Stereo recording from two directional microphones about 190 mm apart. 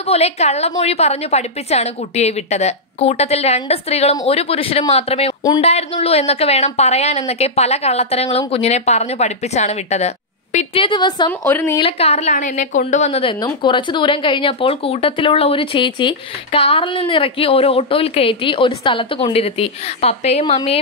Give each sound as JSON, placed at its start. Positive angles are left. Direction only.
{"t": 0.0, "sound": "a woman's voice", "side_deg": 35}
{"t": 11.8, "sound": "speech", "side_deg": 35}